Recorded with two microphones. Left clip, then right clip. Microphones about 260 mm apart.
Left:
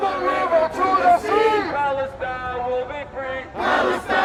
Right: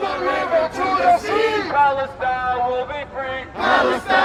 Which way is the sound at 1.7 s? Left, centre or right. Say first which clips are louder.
Right 5 dB; centre.